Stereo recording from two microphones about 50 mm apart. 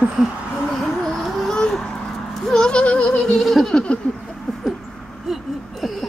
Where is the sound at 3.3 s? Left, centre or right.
Centre.